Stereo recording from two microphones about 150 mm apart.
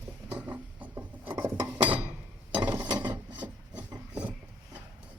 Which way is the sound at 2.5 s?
10° right (ahead or behind).